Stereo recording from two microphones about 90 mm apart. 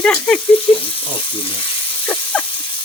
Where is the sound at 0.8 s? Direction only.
80° left.